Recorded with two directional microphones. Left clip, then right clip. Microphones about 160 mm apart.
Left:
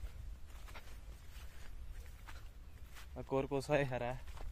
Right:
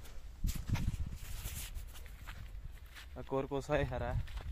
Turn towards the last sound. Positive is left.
turn(degrees=10)  # may be behind; listen again after turning